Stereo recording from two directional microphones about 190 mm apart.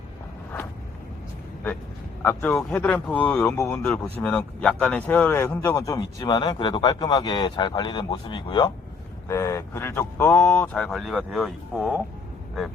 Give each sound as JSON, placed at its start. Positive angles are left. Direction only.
{"t": 2.2, "sound": "speech", "side_deg": 10}